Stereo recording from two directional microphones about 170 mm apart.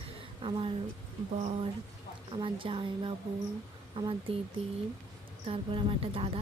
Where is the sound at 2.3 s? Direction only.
30° right (ahead or behind).